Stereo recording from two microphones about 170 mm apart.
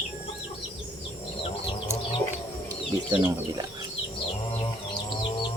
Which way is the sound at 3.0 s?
25° right (ahead or behind).